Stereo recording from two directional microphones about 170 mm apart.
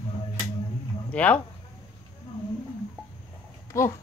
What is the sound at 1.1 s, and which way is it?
Speech, 10° left (ahead or behind).